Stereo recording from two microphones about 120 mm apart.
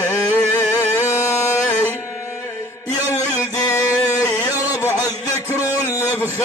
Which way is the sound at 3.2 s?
30° left (ahead or behind).